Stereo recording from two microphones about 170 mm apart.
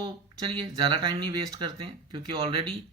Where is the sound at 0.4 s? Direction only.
30° right (ahead or behind).